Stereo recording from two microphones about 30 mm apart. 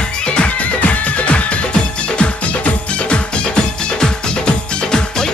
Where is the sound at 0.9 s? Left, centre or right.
Left.